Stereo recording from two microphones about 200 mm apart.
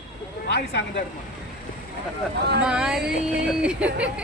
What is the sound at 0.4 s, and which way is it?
Speech, 60° left (ahead or behind).